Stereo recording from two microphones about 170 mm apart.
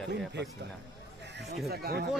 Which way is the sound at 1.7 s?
70° right (ahead or behind).